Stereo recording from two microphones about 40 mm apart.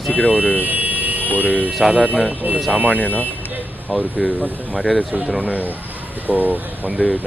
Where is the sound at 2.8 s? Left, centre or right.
Right.